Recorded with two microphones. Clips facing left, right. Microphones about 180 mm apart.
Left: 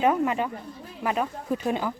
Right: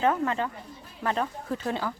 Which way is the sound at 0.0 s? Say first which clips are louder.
Left 2 dB; 15° left (ahead or behind).